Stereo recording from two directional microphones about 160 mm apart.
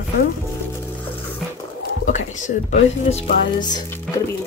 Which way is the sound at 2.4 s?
45° left (ahead or behind).